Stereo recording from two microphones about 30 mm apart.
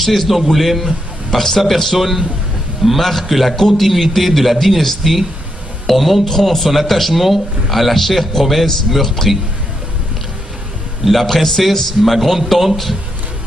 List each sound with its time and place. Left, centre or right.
0.0 s a man's voice: centre
1.4 s a man's voice: centre
11.1 s a man's voice: centre